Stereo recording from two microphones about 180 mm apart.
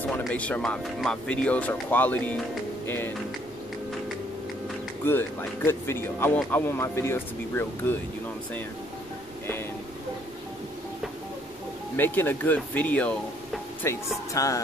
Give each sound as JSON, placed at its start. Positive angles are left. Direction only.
{"t": 0.2, "sound": "speech", "side_deg": 5}
{"t": 5.0, "sound": "speech", "side_deg": 10}
{"t": 12.0, "sound": "speech", "side_deg": 10}
{"t": 13.8, "sound": "speech", "side_deg": 20}